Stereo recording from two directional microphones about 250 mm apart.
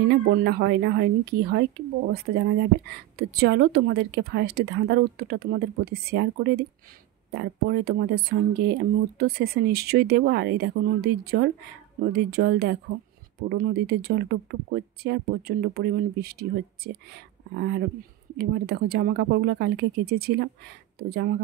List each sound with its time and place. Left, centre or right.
0.1 s speech: right